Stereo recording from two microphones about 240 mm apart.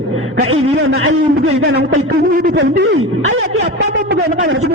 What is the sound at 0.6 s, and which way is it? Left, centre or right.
Speech, right.